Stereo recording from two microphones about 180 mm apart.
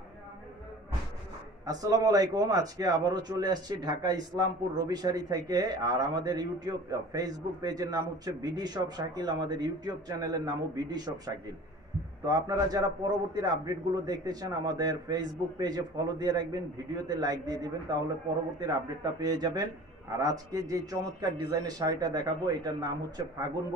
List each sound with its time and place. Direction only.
1.7 s a man's voice: 20° right (ahead or behind)